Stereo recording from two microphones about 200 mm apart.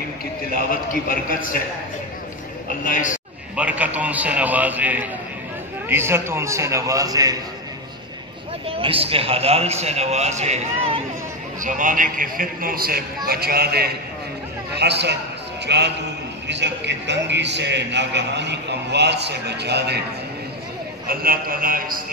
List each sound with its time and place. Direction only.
2.8 s a man's voice: 40° left (ahead or behind)
3.5 s a man's voice: 5° right (ahead or behind)
8.6 s a man's voice: 30° right (ahead or behind); by 20.0 s 55° right (ahead or behind)
21.1 s a man's voice: 45° right (ahead or behind)